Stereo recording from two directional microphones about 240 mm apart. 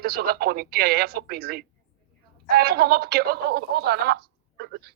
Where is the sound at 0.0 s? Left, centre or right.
Right.